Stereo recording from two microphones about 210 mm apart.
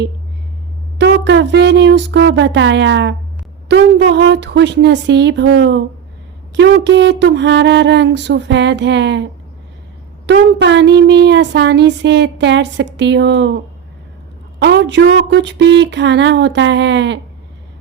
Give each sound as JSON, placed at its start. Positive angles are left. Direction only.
{"t": 0.9, "sound": "speech", "side_deg": -60}
{"t": 10.2, "sound": "speech", "side_deg": -55}
{"t": 14.6, "sound": "speech", "side_deg": -55}